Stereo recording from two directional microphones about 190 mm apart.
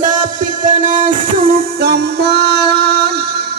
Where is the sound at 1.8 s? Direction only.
60° right (ahead or behind).